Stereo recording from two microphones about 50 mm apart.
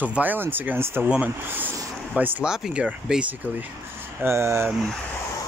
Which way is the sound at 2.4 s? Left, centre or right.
Centre.